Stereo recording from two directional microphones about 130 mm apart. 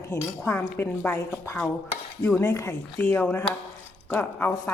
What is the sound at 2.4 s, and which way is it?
Speech, 20° left (ahead or behind).